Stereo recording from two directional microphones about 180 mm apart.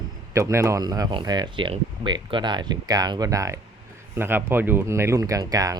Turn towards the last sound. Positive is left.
turn(degrees=-20)  # may be behind; listen again after turning